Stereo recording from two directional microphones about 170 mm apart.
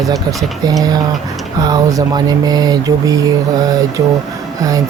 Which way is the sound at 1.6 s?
20° right (ahead or behind).